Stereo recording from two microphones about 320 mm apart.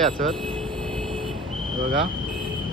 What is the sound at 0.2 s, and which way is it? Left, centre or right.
Speech, right.